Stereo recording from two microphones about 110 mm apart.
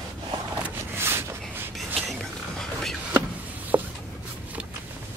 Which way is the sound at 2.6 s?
5° left (ahead or behind).